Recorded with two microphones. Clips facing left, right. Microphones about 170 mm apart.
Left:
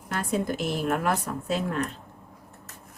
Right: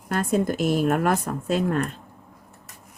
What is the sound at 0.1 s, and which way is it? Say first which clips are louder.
A woman's voice: right 5 dB; 45° right (ahead or behind).